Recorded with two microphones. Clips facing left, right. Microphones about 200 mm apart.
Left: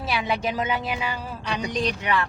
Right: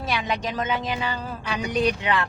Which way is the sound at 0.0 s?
5° left (ahead or behind).